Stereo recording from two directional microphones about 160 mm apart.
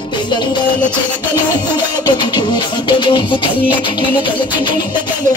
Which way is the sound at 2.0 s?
25° left (ahead or behind).